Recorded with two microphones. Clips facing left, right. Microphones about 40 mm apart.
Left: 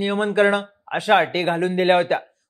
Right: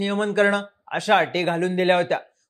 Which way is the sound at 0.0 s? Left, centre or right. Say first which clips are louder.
Left 2 dB; centre.